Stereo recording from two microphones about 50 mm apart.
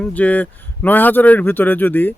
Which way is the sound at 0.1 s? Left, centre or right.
Left.